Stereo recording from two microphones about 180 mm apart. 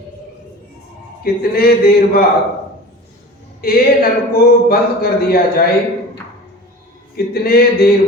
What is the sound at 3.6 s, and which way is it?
A man's voice, 55° left (ahead or behind).